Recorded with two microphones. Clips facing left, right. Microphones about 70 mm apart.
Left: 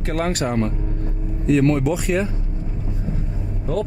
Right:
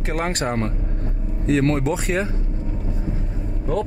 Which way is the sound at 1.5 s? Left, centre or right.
Right.